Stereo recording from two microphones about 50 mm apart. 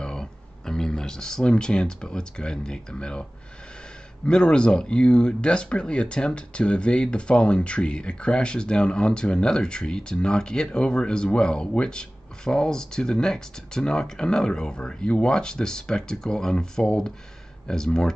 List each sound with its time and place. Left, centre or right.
0.0 s speech: centre
4.3 s speech: left